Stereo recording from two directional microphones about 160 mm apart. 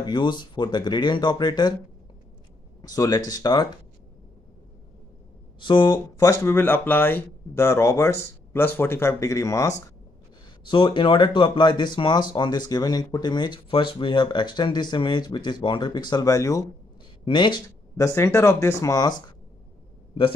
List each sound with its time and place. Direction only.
0.0 s speech: 30° left (ahead or behind)
2.8 s speech: 25° left (ahead or behind)
5.6 s speech: 30° left (ahead or behind)
10.6 s speech: 30° left (ahead or behind)